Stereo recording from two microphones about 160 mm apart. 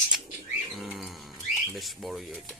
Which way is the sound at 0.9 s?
Centre (ahead or behind).